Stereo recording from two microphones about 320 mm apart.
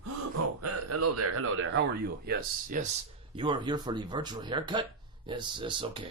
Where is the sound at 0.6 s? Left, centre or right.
Right.